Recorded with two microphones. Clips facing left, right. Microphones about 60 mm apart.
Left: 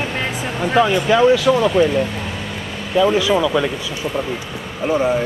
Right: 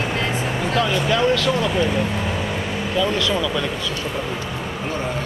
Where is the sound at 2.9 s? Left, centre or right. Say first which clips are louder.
Left 7 dB; centre.